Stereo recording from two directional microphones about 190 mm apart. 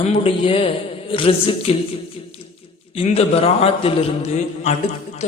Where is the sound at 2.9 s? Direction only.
35° left (ahead or behind).